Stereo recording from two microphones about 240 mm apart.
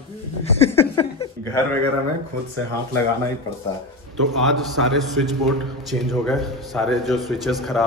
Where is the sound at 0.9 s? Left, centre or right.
Centre.